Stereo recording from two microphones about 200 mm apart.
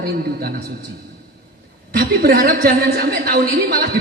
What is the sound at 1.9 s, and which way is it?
A woman's voice, 50° right (ahead or behind).